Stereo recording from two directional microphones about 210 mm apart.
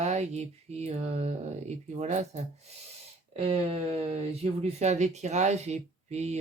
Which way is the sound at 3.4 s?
30° right (ahead or behind).